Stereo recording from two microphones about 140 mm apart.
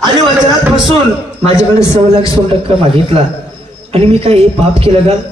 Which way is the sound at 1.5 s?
20° left (ahead or behind).